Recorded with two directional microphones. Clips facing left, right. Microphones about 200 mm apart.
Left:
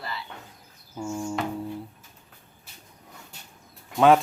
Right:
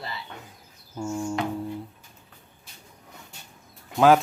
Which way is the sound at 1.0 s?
Centre (ahead or behind).